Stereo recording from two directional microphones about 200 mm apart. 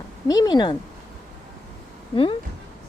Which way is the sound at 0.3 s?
20° left (ahead or behind).